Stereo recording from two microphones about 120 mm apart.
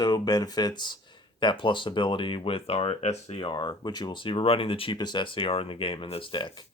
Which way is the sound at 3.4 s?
40° left (ahead or behind).